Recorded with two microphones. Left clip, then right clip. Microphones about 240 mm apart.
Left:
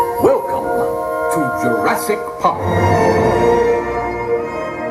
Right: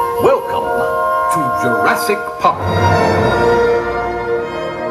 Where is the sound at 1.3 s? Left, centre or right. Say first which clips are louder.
Right 2 dB; right.